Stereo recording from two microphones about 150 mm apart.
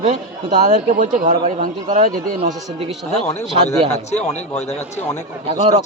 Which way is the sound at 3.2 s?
50° left (ahead or behind).